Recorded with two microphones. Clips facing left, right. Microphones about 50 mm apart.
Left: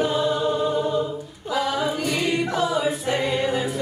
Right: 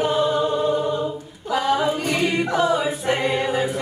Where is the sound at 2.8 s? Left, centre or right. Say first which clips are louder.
Left 1 dB; centre.